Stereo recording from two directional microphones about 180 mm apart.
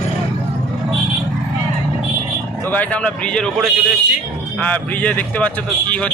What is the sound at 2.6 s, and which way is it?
Speech, 10° left (ahead or behind).